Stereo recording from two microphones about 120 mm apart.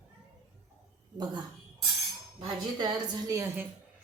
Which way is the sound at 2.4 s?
40° right (ahead or behind).